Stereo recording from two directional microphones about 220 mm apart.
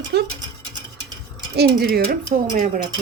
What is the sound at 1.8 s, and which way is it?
Speech, 45° right (ahead or behind).